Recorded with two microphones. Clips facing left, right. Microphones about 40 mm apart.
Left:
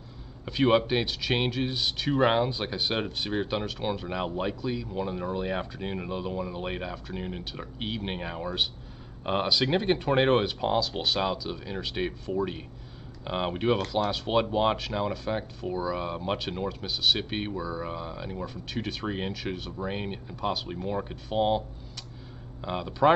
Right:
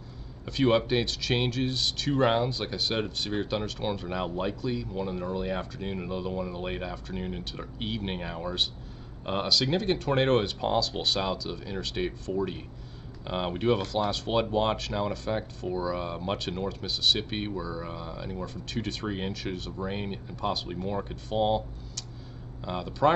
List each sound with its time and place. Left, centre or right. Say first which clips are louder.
0.5 s speech: left 1 dB; centre